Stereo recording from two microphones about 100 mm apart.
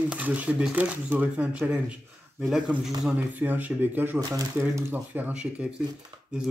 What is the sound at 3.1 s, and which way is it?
Speech, 15° right (ahead or behind).